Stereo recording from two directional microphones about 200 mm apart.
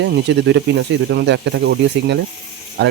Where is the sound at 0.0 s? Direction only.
60° right (ahead or behind).